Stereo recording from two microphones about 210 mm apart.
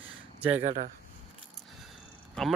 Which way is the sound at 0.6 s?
35° right (ahead or behind).